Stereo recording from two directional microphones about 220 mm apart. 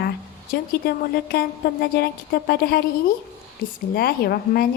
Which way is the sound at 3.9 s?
45° left (ahead or behind).